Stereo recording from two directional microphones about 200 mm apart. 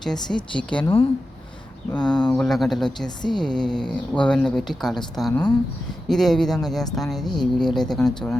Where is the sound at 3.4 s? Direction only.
5° left (ahead or behind).